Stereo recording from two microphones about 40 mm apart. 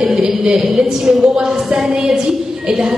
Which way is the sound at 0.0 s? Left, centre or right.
Centre.